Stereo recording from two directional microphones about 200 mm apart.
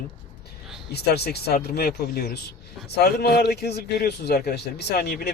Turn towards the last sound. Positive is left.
turn(degrees=50)  # may be behind; listen again after turning